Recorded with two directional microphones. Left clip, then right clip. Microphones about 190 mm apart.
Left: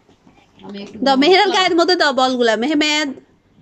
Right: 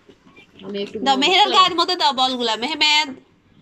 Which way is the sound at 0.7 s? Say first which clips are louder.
Left 3 dB; 25° left (ahead or behind).